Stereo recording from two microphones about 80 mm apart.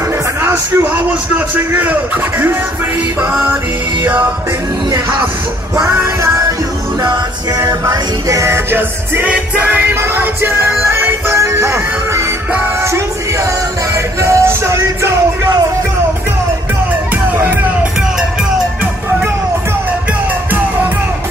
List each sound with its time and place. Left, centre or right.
0.4 s a man's voice: centre
4.0 s a man's voice: right
7.0 s music: right
8.3 s music: right
8.7 s a man's voice: right
11.3 s music: right
14.2 s music: right